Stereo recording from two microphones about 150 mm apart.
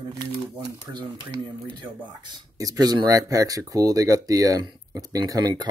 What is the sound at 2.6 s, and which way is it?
Speech, 25° right (ahead or behind).